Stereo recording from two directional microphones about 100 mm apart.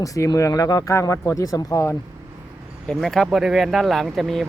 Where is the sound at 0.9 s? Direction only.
30° left (ahead or behind).